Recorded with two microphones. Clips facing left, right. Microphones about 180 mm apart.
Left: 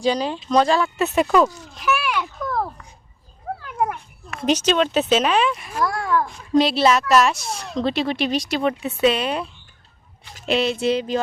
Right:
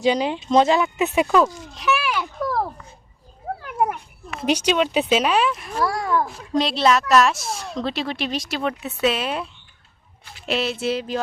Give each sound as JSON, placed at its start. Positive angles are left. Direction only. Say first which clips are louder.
{"t": 0.0, "sound": "speech", "louder": "right 1 dB", "side_deg": -20}
{"t": 1.7, "sound": "a child's voice", "louder": "even", "side_deg": 0}
{"t": 4.3, "sound": "speech", "louder": "left 1 dB", "side_deg": -10}
{"t": 5.7, "sound": "a child's voice", "louder": "even", "side_deg": -30}
{"t": 6.5, "sound": "speech", "louder": "left 3 dB", "side_deg": 0}